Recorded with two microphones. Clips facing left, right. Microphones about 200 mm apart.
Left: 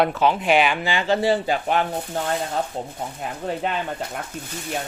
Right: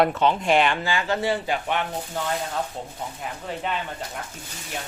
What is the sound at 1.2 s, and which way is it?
Speech, 35° left (ahead or behind).